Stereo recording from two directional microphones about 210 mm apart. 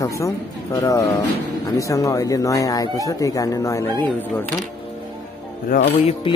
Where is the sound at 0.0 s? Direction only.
15° left (ahead or behind).